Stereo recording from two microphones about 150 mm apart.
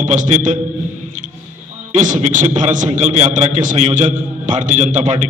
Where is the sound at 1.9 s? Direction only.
55° right (ahead or behind).